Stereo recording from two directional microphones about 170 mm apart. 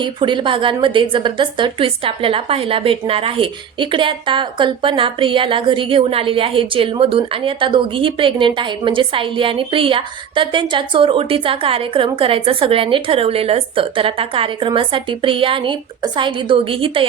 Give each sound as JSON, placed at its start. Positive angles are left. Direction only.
{"t": 0.0, "sound": "a woman's voice", "side_deg": -30}